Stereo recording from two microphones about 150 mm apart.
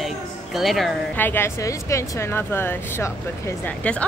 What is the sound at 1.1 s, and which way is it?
A woman's voice, 15° left (ahead or behind).